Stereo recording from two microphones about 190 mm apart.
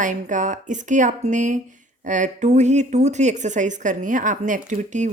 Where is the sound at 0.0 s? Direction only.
40° right (ahead or behind).